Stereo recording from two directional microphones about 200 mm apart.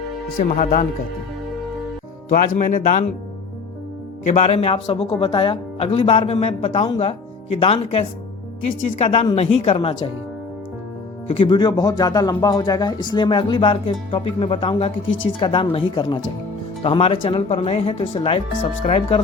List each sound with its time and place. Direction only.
0.3 s speech: 50° left (ahead or behind)
2.3 s speech: 40° left (ahead or behind)
4.3 s speech: 35° left (ahead or behind)
11.3 s speech: 25° left (ahead or behind)